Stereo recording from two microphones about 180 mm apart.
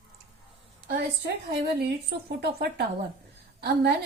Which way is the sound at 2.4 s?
65° right (ahead or behind).